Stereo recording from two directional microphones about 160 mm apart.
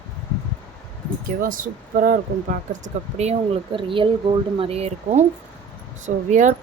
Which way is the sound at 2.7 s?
45° right (ahead or behind).